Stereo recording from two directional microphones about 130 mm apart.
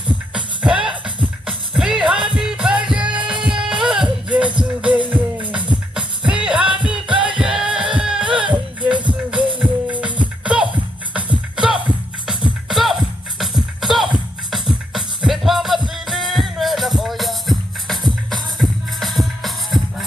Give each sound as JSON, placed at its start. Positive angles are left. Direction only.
{"t": 0.3, "sound": "music", "side_deg": -10}
{"t": 8.4, "sound": "music", "side_deg": -35}
{"t": 9.6, "sound": "music", "side_deg": -10}